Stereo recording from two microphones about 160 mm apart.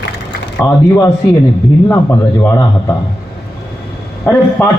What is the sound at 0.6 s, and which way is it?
Speech, 20° left (ahead or behind).